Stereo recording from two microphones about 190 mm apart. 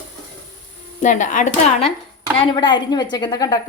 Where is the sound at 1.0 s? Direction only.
40° left (ahead or behind).